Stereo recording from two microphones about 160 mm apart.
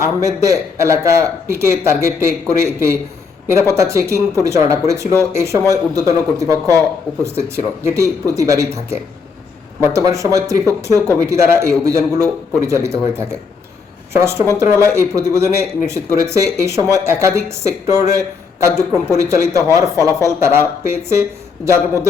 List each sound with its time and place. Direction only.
0.0 s a man's voice: 20° right (ahead or behind)
20.0 s speech: 20° left (ahead or behind)
20.4 s a man's voice: 15° right (ahead or behind)